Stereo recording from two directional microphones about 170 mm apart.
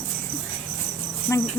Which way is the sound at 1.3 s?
15° left (ahead or behind).